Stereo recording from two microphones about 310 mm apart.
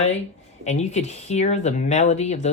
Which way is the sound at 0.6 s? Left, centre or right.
Left.